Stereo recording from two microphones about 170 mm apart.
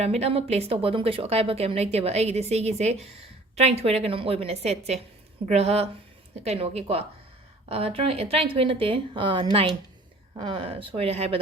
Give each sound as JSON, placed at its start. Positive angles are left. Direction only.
{"t": 0.0, "sound": "speech", "side_deg": -40}